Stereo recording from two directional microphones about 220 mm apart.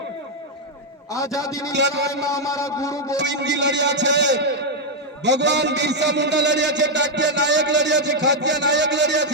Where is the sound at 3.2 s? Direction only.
55° right (ahead or behind).